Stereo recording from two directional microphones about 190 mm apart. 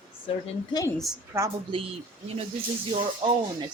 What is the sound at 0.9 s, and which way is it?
Speech, centre (ahead or behind).